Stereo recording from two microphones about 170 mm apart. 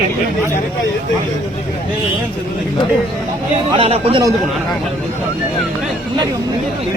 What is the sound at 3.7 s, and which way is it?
Speech, 35° right (ahead or behind).